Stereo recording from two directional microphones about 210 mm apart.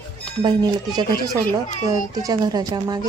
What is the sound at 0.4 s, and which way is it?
Speech, 20° right (ahead or behind).